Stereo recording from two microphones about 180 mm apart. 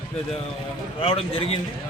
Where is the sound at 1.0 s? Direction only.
30° left (ahead or behind).